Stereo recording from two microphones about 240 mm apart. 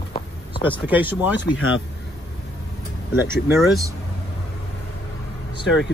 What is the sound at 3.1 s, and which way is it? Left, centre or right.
Speech, centre.